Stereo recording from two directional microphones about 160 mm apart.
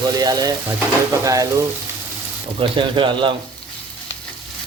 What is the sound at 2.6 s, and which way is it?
Speech, 30° right (ahead or behind).